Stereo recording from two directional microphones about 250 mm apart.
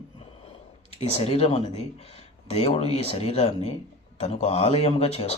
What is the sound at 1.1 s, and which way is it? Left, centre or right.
Speech, left.